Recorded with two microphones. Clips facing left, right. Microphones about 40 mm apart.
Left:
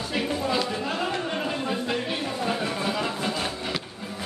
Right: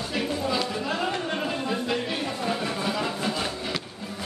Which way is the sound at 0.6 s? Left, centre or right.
Centre.